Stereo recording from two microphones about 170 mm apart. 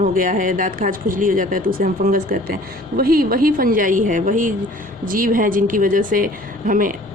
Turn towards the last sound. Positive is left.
turn(degrees=-55)  # may be behind; listen again after turning